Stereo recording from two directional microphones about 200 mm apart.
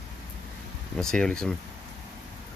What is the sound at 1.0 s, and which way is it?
Speech, 5° left (ahead or behind).